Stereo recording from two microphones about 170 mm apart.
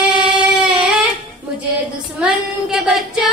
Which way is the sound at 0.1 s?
5° right (ahead or behind).